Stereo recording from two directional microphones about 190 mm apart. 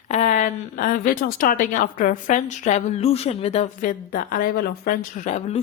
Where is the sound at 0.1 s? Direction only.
40° left (ahead or behind).